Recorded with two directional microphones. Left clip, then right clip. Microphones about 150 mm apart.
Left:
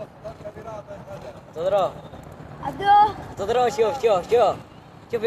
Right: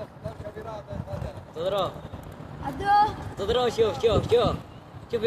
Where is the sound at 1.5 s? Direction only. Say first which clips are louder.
Left 6 dB; 40° right (ahead or behind).